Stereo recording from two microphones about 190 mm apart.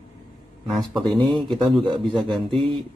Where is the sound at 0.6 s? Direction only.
Centre (ahead or behind).